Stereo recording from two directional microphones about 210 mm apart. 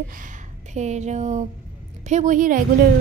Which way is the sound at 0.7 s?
35° right (ahead or behind).